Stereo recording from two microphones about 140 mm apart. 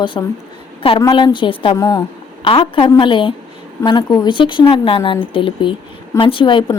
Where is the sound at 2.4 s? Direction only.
40° left (ahead or behind).